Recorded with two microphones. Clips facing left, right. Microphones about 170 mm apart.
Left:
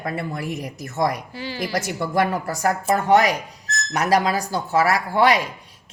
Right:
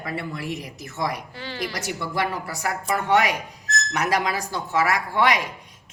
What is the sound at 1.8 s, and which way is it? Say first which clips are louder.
A woman's voice: left 7 dB; 50° left (ahead or behind).